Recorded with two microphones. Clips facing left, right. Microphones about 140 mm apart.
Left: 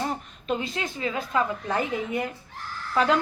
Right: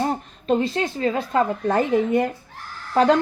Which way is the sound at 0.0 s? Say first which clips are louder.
Right 6 dB; 40° right (ahead or behind).